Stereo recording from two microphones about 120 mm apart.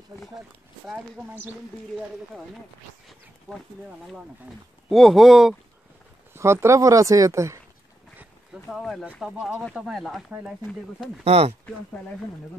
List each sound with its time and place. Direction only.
4.8 s speech: centre (ahead or behind)
6.3 s speech: 20° right (ahead or behind)
8.6 s speech: centre (ahead or behind)
11.2 s speech: 55° right (ahead or behind)